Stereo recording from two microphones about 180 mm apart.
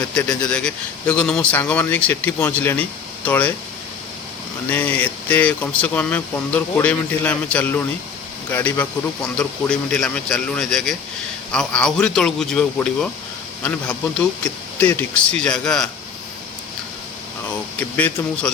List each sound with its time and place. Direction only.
0.3 s speech: 5° left (ahead or behind)
4.7 s speech: 10° left (ahead or behind)
14.4 s speech: 10° left (ahead or behind)
17.7 s speech: 10° left (ahead or behind)